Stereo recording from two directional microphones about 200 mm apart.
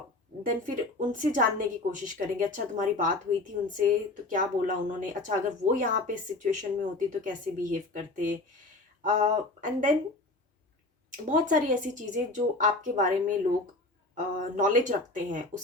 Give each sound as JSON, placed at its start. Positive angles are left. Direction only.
{"t": 0.4, "sound": "a woman's voice", "side_deg": -40}
{"t": 9.6, "sound": "a woman's voice", "side_deg": -40}
{"t": 11.3, "sound": "a woman's voice", "side_deg": -40}
{"t": 14.3, "sound": "a woman's voice", "side_deg": -40}